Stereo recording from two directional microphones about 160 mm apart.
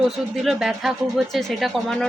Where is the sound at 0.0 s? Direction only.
5° right (ahead or behind).